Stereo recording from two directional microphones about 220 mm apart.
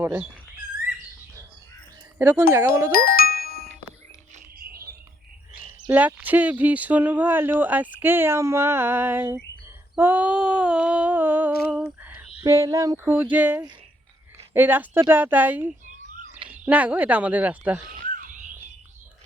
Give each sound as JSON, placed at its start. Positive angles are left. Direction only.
{"t": 0.0, "sound": "speech", "side_deg": -5}
{"t": 2.1, "sound": "speech", "side_deg": -10}
{"t": 2.9, "sound": "music", "side_deg": 40}
{"t": 4.5, "sound": "mechanisms", "side_deg": -40}
{"t": 5.9, "sound": "speech", "side_deg": -5}
{"t": 9.9, "sound": "a sound", "side_deg": -10}
{"t": 13.3, "sound": "speech", "side_deg": -5}
{"t": 15.9, "sound": "a sound", "side_deg": -35}
{"t": 16.6, "sound": "speech", "side_deg": -5}
{"t": 17.9, "sound": "a sound", "side_deg": -40}